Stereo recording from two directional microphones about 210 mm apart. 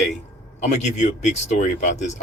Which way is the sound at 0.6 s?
35° left (ahead or behind).